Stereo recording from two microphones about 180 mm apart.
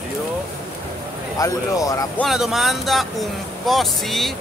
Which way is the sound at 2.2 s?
Centre (ahead or behind).